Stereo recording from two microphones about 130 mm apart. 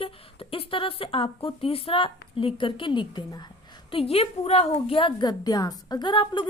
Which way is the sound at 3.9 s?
45° left (ahead or behind).